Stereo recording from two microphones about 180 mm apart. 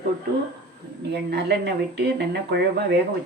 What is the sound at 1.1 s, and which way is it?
Speech, 65° right (ahead or behind).